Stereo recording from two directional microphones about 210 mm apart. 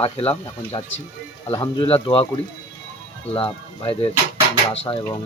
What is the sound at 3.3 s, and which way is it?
Speech, 25° left (ahead or behind).